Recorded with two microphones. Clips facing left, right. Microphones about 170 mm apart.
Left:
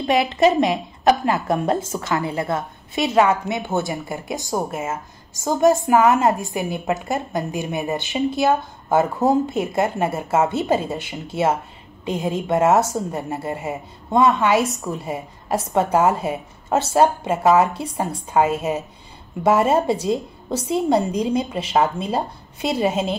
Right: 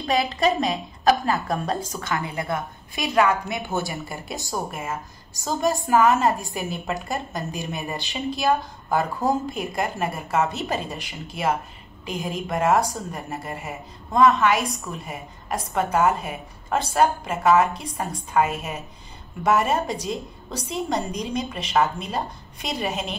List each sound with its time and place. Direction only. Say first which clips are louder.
0.0 s a woman's voice: left 5 dB; 25° left (ahead or behind)